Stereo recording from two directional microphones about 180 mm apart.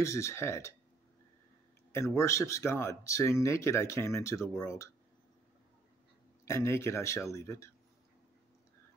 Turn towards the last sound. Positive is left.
turn(degrees=15)  # may be behind; listen again after turning